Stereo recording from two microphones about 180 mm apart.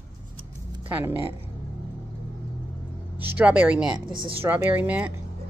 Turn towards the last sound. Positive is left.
turn(degrees=-5)  # may be behind; listen again after turning